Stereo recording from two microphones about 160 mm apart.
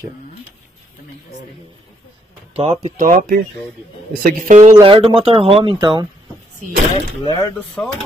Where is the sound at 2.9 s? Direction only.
60° right (ahead or behind).